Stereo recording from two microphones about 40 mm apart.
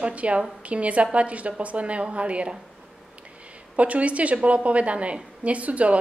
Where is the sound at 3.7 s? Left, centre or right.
Right.